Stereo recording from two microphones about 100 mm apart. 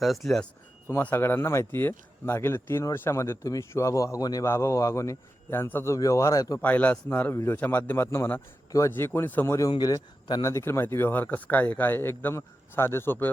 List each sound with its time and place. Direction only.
0.0 s speech: centre (ahead or behind)
0.9 s speech: 20° left (ahead or behind)
6.6 s a man's voice: 15° left (ahead or behind)
9.6 s speech: 40° left (ahead or behind)
10.5 s speech: 25° left (ahead or behind)